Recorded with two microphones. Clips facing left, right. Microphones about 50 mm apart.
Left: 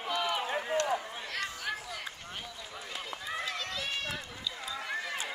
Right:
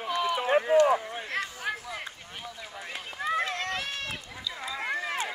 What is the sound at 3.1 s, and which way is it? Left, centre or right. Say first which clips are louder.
Run: right 9 dB; right.